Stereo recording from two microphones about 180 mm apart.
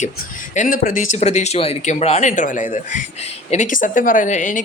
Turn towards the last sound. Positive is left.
turn(degrees=45)  # may be behind; listen again after turning